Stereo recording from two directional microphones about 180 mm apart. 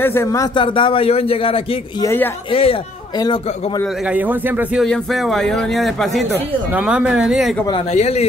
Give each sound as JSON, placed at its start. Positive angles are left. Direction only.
{"t": 0.0, "sound": "a man's voice", "side_deg": 15}
{"t": 2.0, "sound": "speech", "side_deg": 10}
{"t": 2.5, "sound": "a man's voice", "side_deg": 30}
{"t": 3.8, "sound": "speech", "side_deg": -5}
{"t": 4.8, "sound": "a man's voice", "side_deg": 0}
{"t": 7.9, "sound": "a man's voice", "side_deg": 35}